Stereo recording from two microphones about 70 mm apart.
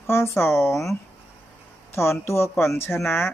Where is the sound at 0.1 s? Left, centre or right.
Left.